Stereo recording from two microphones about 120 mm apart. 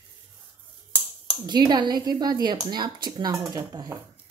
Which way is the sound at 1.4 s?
35° right (ahead or behind).